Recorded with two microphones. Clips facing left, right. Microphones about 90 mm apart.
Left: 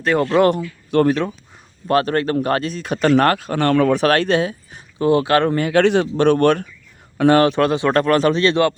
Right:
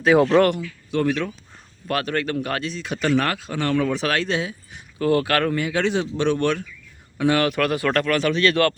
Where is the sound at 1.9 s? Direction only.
35° left (ahead or behind); by 4.8 s 50° left (ahead or behind).